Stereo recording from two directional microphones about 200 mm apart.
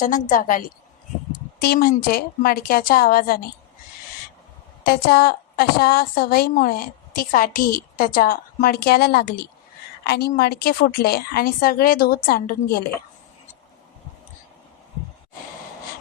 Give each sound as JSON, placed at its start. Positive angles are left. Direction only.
{"t": 0.0, "sound": "a woman's voice", "side_deg": 40}
{"t": 1.6, "sound": "a woman's voice", "side_deg": 50}
{"t": 4.8, "sound": "a woman's voice", "side_deg": 50}